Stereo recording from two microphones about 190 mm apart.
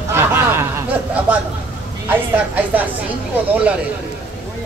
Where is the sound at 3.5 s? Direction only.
5° right (ahead or behind).